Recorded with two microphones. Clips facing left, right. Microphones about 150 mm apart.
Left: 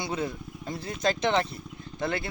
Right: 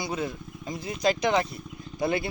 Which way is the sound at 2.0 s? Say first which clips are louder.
Right 4 dB; 20° right (ahead or behind).